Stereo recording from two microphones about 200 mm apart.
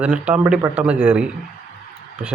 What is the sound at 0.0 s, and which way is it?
Speech, 5° right (ahead or behind).